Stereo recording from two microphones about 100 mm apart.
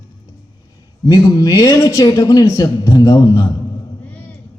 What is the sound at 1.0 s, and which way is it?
A man's voice, 40° left (ahead or behind).